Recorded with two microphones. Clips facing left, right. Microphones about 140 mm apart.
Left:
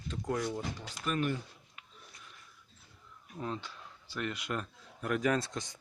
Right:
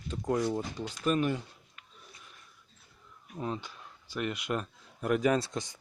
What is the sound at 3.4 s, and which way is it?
Speech, 15° right (ahead or behind).